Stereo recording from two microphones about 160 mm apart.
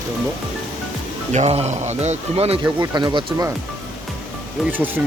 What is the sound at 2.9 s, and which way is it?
Speech, 30° right (ahead or behind).